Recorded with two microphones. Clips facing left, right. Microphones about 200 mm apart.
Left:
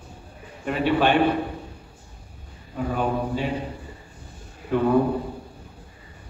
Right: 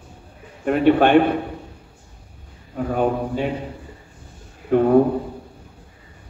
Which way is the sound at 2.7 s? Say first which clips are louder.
Right 4 dB; 55° right (ahead or behind).